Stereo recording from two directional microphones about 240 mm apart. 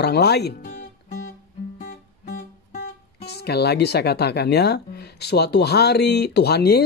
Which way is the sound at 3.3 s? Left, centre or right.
Left.